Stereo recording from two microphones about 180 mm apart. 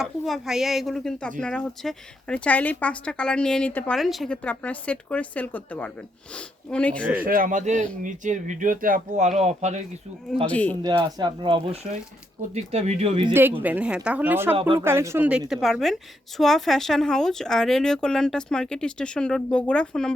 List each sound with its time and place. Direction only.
0.0 s speech: 5° right (ahead or behind)
7.3 s speech: 50° right (ahead or behind)
10.4 s speech: 5° left (ahead or behind)
10.8 s speech: 25° right (ahead or behind)
13.6 s a woman's voice: 10° right (ahead or behind)